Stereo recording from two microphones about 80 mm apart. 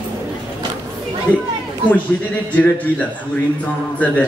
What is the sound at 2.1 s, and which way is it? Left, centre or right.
Music, left.